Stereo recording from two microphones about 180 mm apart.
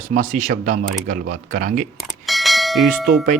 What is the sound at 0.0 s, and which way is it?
Speech, 45° right (ahead or behind).